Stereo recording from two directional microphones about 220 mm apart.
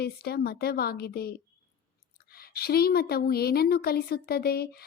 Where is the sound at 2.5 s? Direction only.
45° left (ahead or behind).